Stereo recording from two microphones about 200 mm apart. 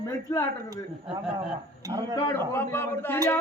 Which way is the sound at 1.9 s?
20° right (ahead or behind).